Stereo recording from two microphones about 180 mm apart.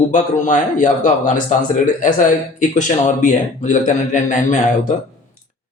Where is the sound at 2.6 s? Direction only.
45° left (ahead or behind).